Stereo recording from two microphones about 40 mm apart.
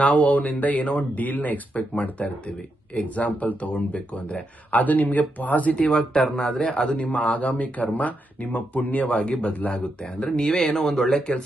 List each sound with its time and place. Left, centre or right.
0.0 s speech: left
5.8 s speech: left
6.9 s speech: left; by 11.3 s centre